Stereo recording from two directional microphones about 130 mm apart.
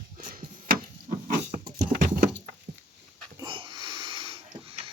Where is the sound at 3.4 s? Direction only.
40° right (ahead or behind).